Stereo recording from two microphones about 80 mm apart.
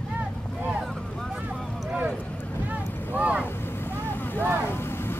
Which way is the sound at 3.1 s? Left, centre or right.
Centre.